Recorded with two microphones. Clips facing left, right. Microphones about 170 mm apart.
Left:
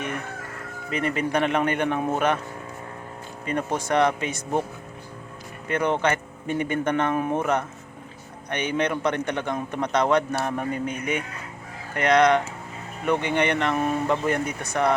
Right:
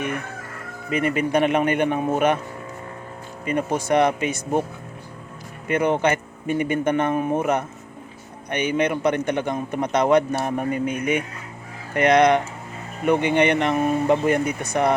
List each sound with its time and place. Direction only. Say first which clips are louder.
0.9 s a man's voice: right 4 dB; 10° right (ahead or behind)
2.0 s speech: right 3 dB; 5° right (ahead or behind)
3.4 s a man's voice: right 3 dB; 10° right (ahead or behind)
5.6 s a man's voice: right 3 dB; 10° right (ahead or behind)